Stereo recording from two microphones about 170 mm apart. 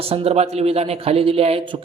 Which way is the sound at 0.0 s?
35° right (ahead or behind).